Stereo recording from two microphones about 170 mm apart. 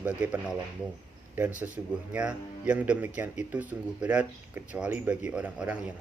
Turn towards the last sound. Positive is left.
turn(degrees=-5)  # may be behind; listen again after turning